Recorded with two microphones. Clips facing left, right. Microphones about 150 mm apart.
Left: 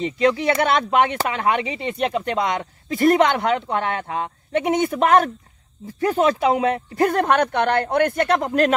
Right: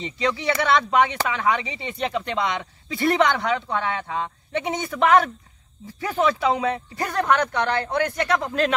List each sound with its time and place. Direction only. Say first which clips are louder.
0.0 s speech: left 6 dB; 50° left (ahead or behind)